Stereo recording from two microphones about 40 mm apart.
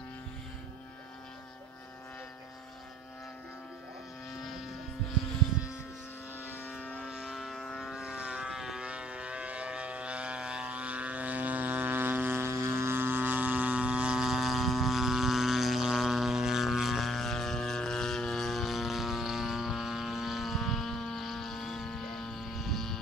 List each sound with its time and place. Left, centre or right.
4.3 s vehicle: centre
6.8 s vehicle: left
7.1 s vehicle: centre
7.5 s vehicle: centre
7.9 s vehicle: centre
8.8 s vehicle: right
14.1 s vehicle: centre